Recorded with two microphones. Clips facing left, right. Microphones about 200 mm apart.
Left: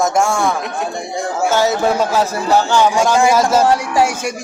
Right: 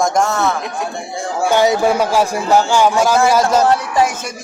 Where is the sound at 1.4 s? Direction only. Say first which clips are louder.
Right 2 dB; 15° right (ahead or behind).